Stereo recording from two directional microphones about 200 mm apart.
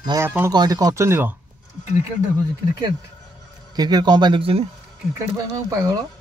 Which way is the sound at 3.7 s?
20° right (ahead or behind).